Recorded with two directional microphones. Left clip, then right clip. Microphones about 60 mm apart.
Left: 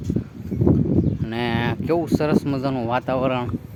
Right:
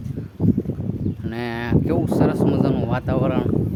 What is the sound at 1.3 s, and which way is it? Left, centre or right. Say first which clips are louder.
Speech: even; left.